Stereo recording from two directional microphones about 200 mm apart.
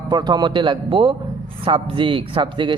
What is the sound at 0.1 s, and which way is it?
Speech, 20° right (ahead or behind).